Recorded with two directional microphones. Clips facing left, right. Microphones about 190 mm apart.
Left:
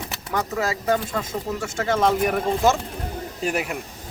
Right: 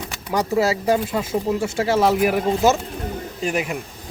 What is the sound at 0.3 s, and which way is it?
Speech, 15° right (ahead or behind).